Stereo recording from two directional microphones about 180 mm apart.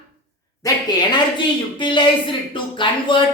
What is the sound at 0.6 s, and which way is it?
Speech, 25° left (ahead or behind).